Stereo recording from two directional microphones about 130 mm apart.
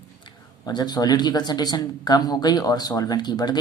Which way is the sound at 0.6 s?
30° left (ahead or behind).